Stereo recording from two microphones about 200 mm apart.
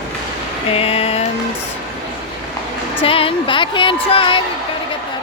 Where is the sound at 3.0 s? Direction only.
25° left (ahead or behind).